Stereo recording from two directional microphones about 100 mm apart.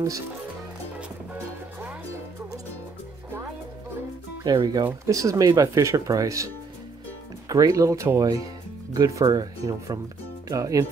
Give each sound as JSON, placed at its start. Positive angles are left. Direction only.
{"t": 1.3, "sound": "music", "side_deg": -15}
{"t": 4.5, "sound": "speech", "side_deg": -40}